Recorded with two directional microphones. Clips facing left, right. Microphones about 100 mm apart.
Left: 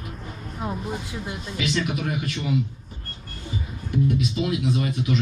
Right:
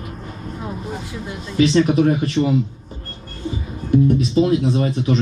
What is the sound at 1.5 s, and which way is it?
Speech, 35° right (ahead or behind).